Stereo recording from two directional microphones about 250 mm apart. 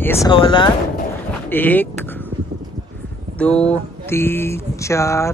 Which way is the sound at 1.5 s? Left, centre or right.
Centre.